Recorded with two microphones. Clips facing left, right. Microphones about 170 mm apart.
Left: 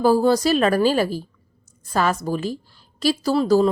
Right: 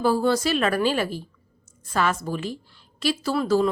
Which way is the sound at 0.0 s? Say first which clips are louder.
Left 4 dB; 40° left (ahead or behind).